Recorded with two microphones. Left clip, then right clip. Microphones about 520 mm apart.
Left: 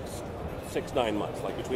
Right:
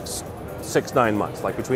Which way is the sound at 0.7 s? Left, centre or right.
Right.